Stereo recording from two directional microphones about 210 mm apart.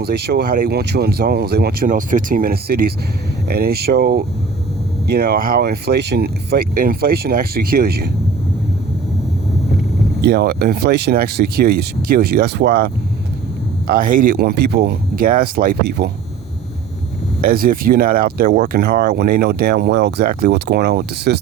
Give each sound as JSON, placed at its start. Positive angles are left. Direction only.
{"t": 0.0, "sound": "speech", "side_deg": -50}
{"t": 10.2, "sound": "speech", "side_deg": -50}
{"t": 17.4, "sound": "speech", "side_deg": -45}